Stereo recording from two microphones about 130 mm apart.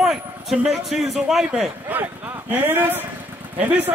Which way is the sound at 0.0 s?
5° right (ahead or behind).